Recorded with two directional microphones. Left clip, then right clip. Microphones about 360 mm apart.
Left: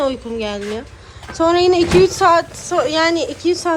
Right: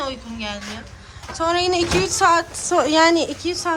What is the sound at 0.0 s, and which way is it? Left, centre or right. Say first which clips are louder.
A woman's voice: left 8 dB; centre.